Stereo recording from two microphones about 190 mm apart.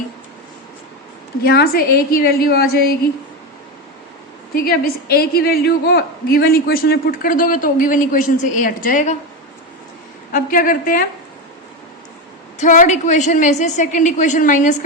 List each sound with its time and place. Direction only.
1.5 s a woman's voice: 55° left (ahead or behind)
4.5 s a woman's voice: 50° left (ahead or behind)
10.3 s a woman's voice: 45° left (ahead or behind)
12.5 s a woman's voice: 40° left (ahead or behind)